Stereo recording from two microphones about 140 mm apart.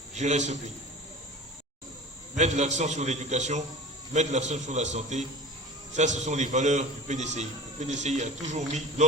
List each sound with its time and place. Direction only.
0.1 s a man's voice: 55° right (ahead or behind)
2.3 s a man's voice: 55° right (ahead or behind)